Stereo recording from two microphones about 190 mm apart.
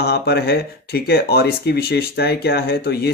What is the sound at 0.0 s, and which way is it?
Speech, 60° left (ahead or behind).